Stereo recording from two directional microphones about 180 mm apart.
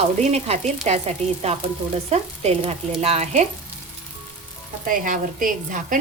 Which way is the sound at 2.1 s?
35° right (ahead or behind).